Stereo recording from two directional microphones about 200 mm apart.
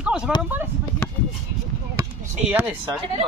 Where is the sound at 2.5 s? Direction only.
5° right (ahead or behind).